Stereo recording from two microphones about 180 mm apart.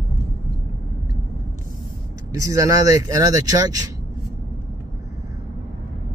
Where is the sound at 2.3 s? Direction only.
15° right (ahead or behind).